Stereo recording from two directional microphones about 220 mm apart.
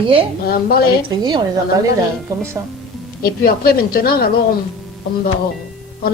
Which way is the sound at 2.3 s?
15° right (ahead or behind).